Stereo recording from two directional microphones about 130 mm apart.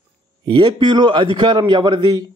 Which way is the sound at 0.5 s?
35° right (ahead or behind).